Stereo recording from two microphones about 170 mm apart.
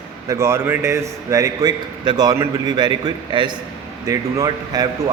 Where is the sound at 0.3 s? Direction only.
15° right (ahead or behind).